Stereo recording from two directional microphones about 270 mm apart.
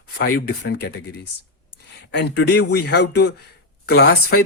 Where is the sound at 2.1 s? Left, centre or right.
Left.